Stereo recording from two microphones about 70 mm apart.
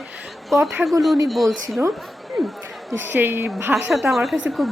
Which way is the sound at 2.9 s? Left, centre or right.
Right.